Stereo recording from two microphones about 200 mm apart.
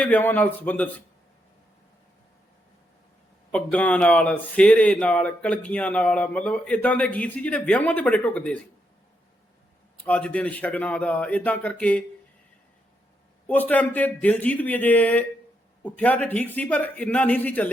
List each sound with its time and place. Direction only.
0.0 s speech: 10° left (ahead or behind)
3.5 s speech: 5° left (ahead or behind)
10.0 s speech: 5° left (ahead or behind)
13.5 s speech: 10° left (ahead or behind)